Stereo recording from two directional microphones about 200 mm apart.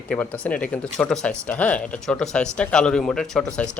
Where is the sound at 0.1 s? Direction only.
5° left (ahead or behind).